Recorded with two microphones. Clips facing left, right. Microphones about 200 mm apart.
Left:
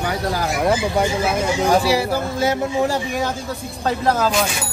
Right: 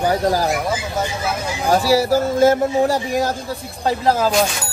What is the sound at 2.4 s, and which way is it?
Speech, 45° right (ahead or behind).